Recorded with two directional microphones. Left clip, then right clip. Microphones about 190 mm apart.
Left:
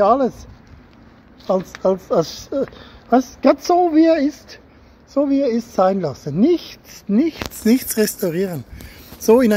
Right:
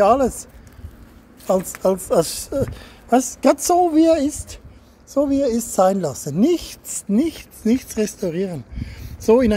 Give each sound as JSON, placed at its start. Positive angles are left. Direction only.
{"t": 0.0, "sound": "a woman's voice", "side_deg": -15}
{"t": 1.8, "sound": "a woman's voice", "side_deg": -10}
{"t": 7.6, "sound": "speech", "side_deg": 0}